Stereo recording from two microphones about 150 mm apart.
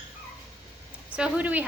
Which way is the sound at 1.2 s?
10° right (ahead or behind).